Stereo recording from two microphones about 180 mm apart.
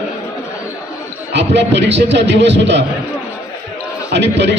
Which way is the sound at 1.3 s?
75° right (ahead or behind).